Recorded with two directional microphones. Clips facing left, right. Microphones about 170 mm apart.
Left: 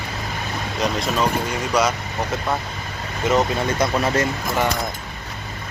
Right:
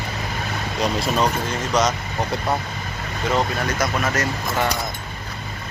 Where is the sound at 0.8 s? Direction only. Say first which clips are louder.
Right 1 dB; centre (ahead or behind).